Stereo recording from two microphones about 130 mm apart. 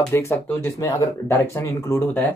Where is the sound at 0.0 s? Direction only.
20° left (ahead or behind).